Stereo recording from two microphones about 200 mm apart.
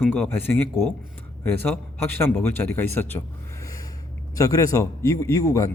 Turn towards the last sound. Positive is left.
turn(degrees=15)  # may be behind; listen again after turning